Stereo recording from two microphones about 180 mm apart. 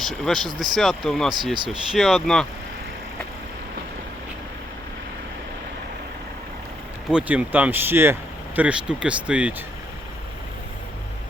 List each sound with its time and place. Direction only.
0.0 s speech: centre (ahead or behind)
1.5 s speech: 25° right (ahead or behind)
1.9 s speech: centre (ahead or behind)
7.1 s speech: 5° right (ahead or behind)